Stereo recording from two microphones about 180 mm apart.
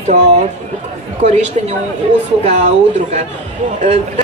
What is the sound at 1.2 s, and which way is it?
Speech, 40° right (ahead or behind).